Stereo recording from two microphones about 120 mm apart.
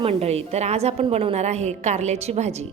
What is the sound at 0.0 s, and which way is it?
A woman's voice, 55° right (ahead or behind).